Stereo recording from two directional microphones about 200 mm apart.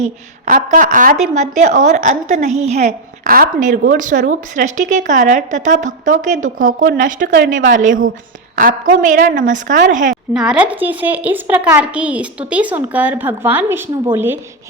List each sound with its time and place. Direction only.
0.0 s speech: 40° right (ahead or behind)
10.3 s a woman's voice: 5° right (ahead or behind)